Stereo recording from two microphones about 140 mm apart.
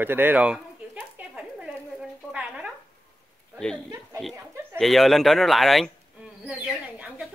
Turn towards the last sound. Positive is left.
turn(degrees=-10)  # may be behind; listen again after turning